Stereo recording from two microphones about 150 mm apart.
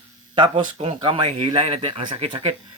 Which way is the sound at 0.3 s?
35° right (ahead or behind).